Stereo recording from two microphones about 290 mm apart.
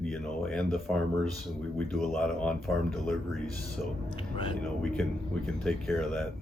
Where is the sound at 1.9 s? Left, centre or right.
Centre.